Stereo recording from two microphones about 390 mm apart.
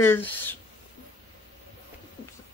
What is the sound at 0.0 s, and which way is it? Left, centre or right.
Speech, centre.